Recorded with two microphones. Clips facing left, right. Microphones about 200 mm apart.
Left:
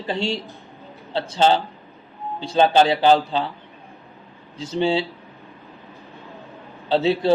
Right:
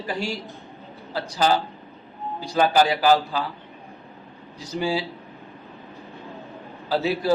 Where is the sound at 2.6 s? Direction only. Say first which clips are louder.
Left 3 dB; 25° left (ahead or behind).